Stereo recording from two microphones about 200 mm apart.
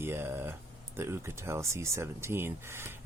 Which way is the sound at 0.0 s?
10° right (ahead or behind).